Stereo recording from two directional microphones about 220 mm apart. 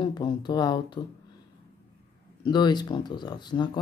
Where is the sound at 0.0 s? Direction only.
20° left (ahead or behind).